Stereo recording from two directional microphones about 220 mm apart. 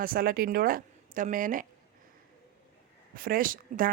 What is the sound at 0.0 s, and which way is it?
Speech, 40° right (ahead or behind).